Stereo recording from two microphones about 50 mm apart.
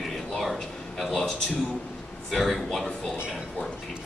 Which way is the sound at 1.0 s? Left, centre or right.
Centre.